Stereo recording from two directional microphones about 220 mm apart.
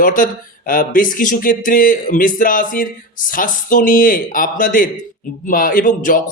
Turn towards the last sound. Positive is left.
turn(degrees=40)  # may be behind; listen again after turning